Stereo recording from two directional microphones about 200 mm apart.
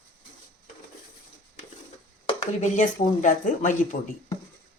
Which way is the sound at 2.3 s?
35° left (ahead or behind).